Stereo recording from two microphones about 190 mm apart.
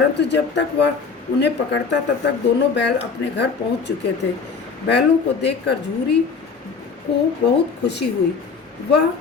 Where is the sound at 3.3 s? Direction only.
65° left (ahead or behind).